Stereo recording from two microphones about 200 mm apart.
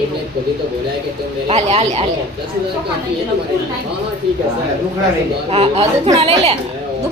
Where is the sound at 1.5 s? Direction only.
30° right (ahead or behind).